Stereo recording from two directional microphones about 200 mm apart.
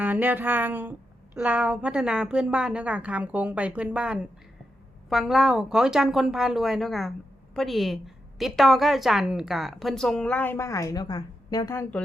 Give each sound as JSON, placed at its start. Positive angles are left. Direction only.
{"t": 0.0, "sound": "a woman's voice", "side_deg": -10}